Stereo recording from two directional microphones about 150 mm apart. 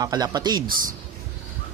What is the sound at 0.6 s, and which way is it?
Speech, 70° right (ahead or behind).